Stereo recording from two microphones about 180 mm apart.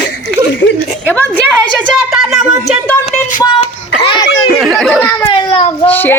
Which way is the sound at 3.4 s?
30° left (ahead or behind).